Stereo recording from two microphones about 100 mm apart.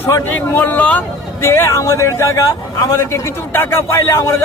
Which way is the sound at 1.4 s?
25° left (ahead or behind).